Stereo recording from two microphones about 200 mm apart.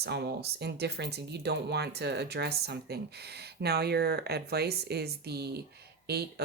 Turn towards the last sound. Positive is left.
turn(degrees=-50)  # may be behind; listen again after turning